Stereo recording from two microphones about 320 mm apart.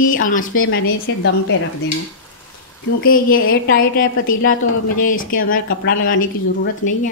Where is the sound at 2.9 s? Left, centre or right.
Left.